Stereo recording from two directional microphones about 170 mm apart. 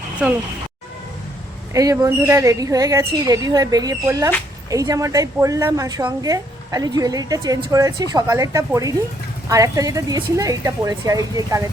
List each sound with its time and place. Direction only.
0.2 s speech: 5° right (ahead or behind)
1.7 s a woman's voice: 20° right (ahead or behind)